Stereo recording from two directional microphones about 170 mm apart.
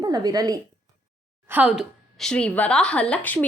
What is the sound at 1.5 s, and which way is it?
A woman's voice, 10° right (ahead or behind).